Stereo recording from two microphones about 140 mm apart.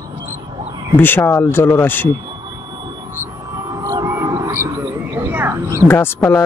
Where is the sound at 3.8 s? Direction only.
25° right (ahead or behind).